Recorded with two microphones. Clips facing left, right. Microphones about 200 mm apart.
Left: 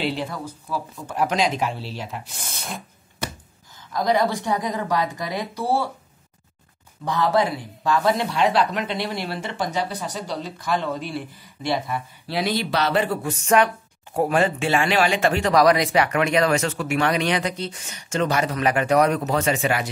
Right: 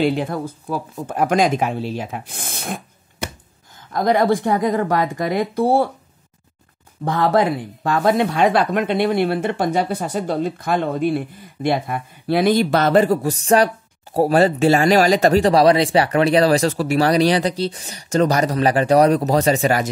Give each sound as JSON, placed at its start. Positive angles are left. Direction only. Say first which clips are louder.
{"t": 0.0, "sound": "speech", "louder": "right 7 dB", "side_deg": -50}
{"t": 7.1, "sound": "speech", "louder": "right 4 dB", "side_deg": -55}